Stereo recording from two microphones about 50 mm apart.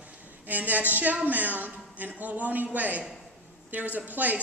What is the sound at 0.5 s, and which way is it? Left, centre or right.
A man's voice, right.